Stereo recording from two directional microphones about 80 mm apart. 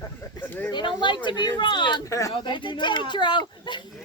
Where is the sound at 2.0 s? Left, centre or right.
Left.